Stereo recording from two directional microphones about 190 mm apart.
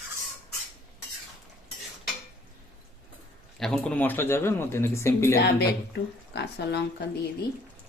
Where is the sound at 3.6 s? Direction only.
5° left (ahead or behind).